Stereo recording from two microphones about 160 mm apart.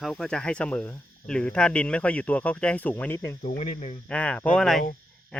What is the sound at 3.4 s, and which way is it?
Speech, 45° left (ahead or behind).